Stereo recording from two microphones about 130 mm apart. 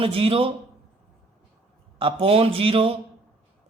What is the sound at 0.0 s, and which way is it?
Speech, 45° right (ahead or behind).